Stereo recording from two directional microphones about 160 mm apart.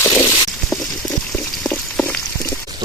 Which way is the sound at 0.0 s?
15° left (ahead or behind).